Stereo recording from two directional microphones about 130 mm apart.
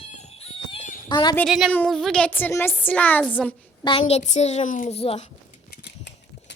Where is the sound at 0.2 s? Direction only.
55° left (ahead or behind).